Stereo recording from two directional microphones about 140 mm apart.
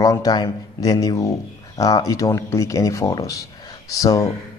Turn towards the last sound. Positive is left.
turn(degrees=25)  # may be behind; listen again after turning